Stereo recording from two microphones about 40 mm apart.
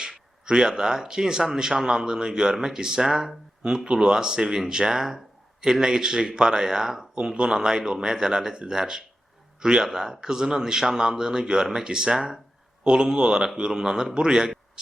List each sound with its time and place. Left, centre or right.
0.0 s a man's voice: centre